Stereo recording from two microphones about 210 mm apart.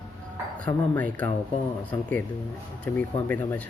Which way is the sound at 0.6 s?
5° left (ahead or behind).